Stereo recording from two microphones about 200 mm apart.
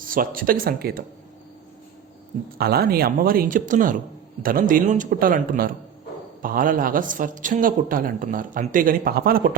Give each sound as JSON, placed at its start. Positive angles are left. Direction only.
{"t": 0.0, "sound": "a man's voice", "side_deg": -45}
{"t": 2.6, "sound": "a man's voice", "side_deg": -50}